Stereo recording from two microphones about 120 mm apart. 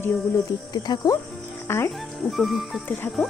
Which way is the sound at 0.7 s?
35° left (ahead or behind).